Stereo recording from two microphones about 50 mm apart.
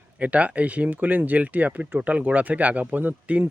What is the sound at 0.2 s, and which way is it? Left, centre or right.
Speech, right.